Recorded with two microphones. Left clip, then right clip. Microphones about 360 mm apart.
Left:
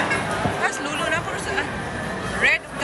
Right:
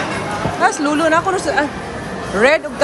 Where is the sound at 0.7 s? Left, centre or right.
Centre.